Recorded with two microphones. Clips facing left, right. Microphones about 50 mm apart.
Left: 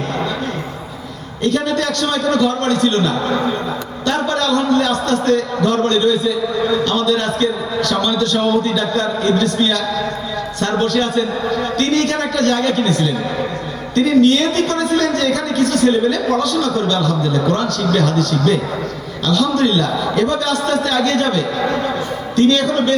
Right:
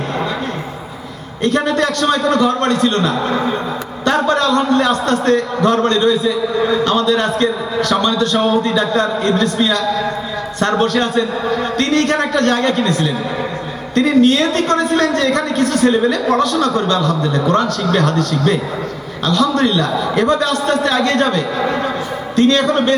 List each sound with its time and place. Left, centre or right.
1.5 s a man's voice: centre